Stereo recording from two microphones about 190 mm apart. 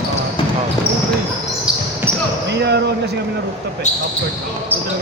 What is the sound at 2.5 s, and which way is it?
Speech, 60° right (ahead or behind).